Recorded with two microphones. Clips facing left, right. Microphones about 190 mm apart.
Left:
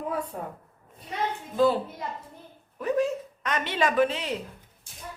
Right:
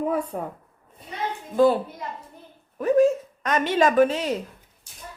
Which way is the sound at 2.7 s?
45° right (ahead or behind).